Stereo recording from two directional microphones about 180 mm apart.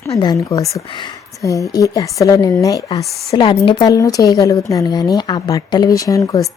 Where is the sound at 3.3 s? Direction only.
30° left (ahead or behind).